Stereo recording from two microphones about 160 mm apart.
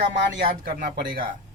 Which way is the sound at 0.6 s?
65° right (ahead or behind).